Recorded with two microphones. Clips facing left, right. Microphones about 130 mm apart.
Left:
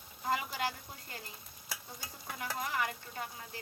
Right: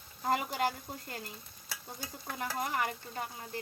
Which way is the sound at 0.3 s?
50° right (ahead or behind).